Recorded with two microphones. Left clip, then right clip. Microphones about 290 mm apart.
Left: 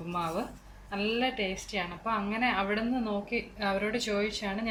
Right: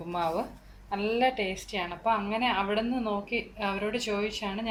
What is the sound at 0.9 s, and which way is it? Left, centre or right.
A woman's voice, centre.